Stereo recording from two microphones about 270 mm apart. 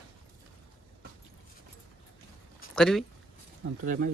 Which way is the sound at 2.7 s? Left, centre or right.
Centre.